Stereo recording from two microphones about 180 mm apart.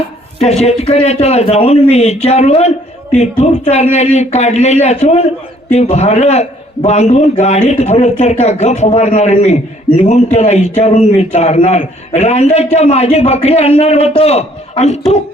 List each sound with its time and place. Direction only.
0.3 s a man's voice: 35° left (ahead or behind)